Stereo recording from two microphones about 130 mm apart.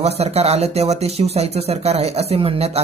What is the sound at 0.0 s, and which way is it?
Speech, 55° right (ahead or behind).